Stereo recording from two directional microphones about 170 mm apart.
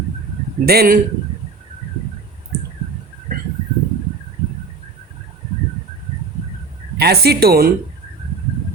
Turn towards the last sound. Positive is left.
turn(degrees=-65)  # may be behind; listen again after turning